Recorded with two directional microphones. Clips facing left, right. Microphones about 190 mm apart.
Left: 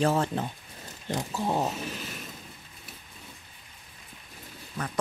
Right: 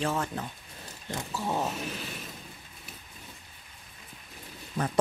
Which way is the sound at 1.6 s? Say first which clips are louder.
Left 1 dB; centre (ahead or behind).